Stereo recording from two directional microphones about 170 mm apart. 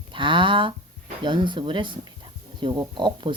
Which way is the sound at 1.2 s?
25° right (ahead or behind).